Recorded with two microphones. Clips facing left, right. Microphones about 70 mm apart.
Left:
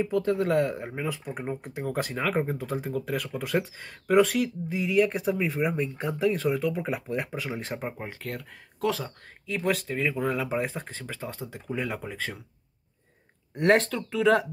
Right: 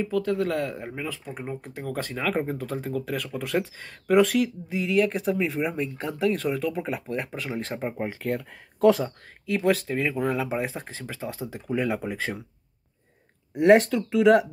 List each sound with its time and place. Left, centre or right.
0.0 s speech: centre
0.6 s speech: centre
8.0 s speech: centre
9.0 s speech: centre
11.7 s speech: centre
13.6 s speech: centre